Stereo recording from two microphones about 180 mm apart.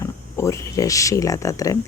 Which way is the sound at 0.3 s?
15° left (ahead or behind).